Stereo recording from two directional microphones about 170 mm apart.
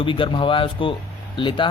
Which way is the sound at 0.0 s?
30° left (ahead or behind).